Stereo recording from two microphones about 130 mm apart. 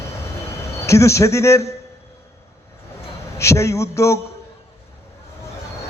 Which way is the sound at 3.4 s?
20° left (ahead or behind).